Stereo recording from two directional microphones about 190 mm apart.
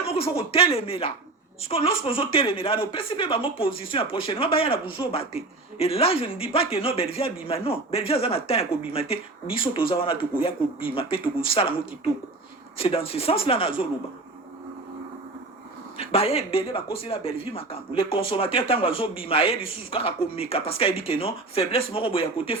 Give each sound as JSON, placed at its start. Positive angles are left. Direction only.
{"t": 0.1, "sound": "speech", "side_deg": 30}
{"t": 12.8, "sound": "speech", "side_deg": 30}
{"t": 16.0, "sound": "speech", "side_deg": 30}